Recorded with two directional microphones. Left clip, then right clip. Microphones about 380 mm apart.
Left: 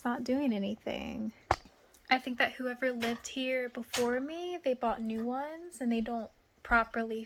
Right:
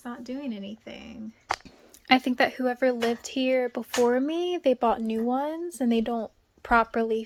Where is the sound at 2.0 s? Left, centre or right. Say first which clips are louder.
Right 7 dB; centre.